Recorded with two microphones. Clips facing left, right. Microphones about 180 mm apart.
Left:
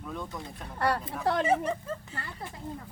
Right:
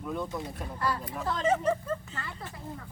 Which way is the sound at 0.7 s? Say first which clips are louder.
Left 4 dB; 65° left (ahead or behind).